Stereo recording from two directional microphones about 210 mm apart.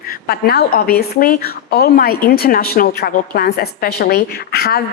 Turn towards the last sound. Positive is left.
turn(degrees=45)  # may be behind; listen again after turning